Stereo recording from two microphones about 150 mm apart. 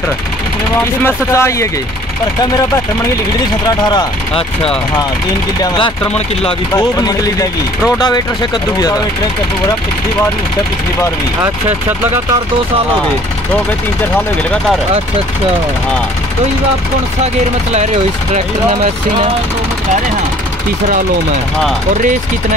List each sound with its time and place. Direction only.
1.0 s speech: 20° left (ahead or behind)
3.8 s speech: 30° left (ahead or behind)
6.7 s speech: 25° left (ahead or behind)
21.9 s speech: 55° right (ahead or behind)